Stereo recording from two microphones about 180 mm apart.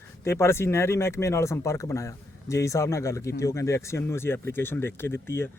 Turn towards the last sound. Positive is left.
turn(degrees=15)  # may be behind; listen again after turning